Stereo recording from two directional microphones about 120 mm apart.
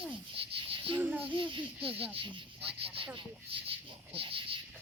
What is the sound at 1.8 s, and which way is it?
Speech, 50° right (ahead or behind).